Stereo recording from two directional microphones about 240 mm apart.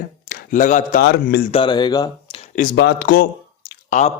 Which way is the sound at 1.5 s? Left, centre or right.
Left.